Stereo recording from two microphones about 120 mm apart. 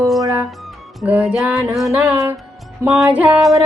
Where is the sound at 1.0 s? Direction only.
10° right (ahead or behind).